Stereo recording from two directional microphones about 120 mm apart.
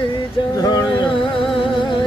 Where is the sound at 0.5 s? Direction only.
30° left (ahead or behind).